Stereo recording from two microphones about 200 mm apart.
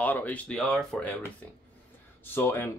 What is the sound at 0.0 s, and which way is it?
Speech, 10° left (ahead or behind).